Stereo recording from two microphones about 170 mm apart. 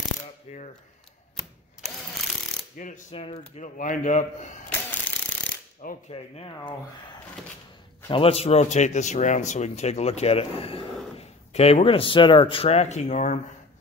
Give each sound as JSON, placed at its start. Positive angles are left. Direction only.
{"t": 0.5, "sound": "speech", "side_deg": 35}
{"t": 2.8, "sound": "a man's voice", "side_deg": 45}
{"t": 3.2, "sound": "speech", "side_deg": 35}
{"t": 3.6, "sound": "a man's voice", "side_deg": 50}
{"t": 6.0, "sound": "speech", "side_deg": 35}
{"t": 8.1, "sound": "speech", "side_deg": 35}